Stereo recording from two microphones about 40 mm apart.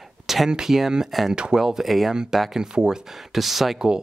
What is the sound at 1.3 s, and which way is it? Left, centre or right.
Speech, right.